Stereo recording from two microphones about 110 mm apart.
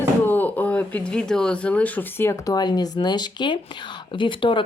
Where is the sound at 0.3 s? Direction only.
15° left (ahead or behind).